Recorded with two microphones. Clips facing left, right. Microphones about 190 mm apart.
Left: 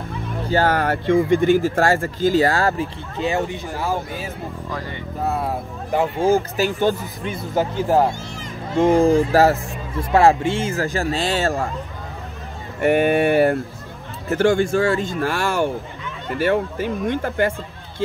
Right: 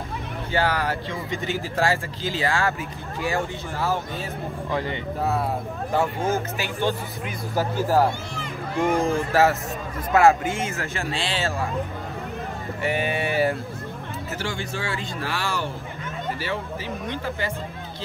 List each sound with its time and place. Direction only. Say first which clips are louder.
0.5 s speech: left 5 dB; 45° left (ahead or behind)
3.2 s speech: left 4 dB; 20° left (ahead or behind)
4.6 s speech: right 5 dB; 20° right (ahead or behind)
6.5 s speech: left 6 dB; 45° left (ahead or behind)
7.2 s speech: left 5 dB; 20° left (ahead or behind)
8.7 s speech: left 8 dB; 35° left (ahead or behind)
12.8 s speech: left 10 dB; 55° left (ahead or behind)